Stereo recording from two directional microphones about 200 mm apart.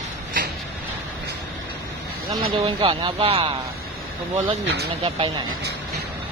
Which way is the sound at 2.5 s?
25° right (ahead or behind).